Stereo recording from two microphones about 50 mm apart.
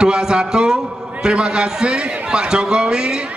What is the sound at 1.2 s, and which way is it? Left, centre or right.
A man's voice, centre.